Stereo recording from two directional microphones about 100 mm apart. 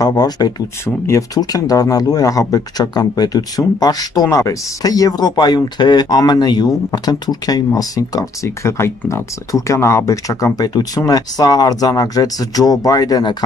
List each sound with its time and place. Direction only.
0.0 s speech: 40° left (ahead or behind)
0.8 s speech: 25° left (ahead or behind)
1.3 s speech: 40° left (ahead or behind)
8.5 s speech: 25° left (ahead or behind); by 13.4 s 40° left (ahead or behind)